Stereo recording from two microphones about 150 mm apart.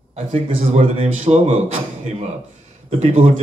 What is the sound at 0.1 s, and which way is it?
A man's voice, 50° right (ahead or behind).